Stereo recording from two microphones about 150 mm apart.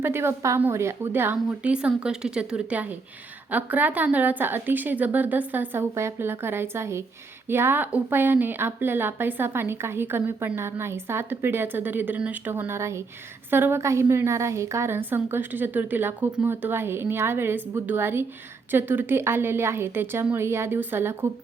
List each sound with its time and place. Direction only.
0.0 s a woman's voice: 15° right (ahead or behind)